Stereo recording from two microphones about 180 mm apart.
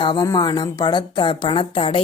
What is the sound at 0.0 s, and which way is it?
Speech, 25° left (ahead or behind).